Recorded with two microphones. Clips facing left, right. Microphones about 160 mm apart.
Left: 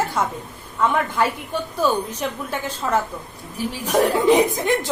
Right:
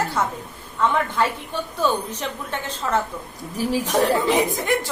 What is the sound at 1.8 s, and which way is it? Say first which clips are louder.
A woman's voice: left 2 dB; 10° left (ahead or behind).